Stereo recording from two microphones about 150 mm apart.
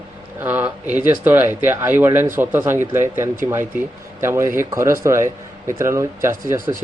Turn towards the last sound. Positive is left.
turn(degrees=-15)  # may be behind; listen again after turning